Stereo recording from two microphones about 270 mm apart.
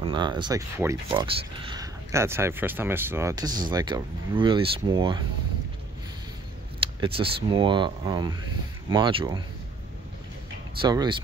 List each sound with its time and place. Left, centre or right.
0.0 s speech: centre
6.8 s speech: centre
10.8 s speech: centre